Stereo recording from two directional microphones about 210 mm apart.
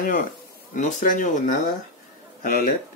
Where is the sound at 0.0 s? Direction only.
40° left (ahead or behind).